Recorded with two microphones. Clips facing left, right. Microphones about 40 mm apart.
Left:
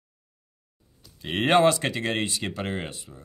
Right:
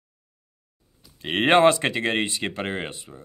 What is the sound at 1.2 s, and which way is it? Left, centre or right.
Speech, right.